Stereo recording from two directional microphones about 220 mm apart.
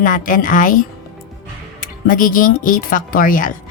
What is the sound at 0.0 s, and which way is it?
Speech, 35° left (ahead or behind).